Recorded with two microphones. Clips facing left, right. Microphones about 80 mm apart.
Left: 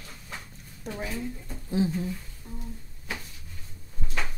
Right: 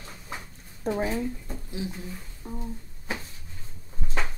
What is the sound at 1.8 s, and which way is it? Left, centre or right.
Speech, left.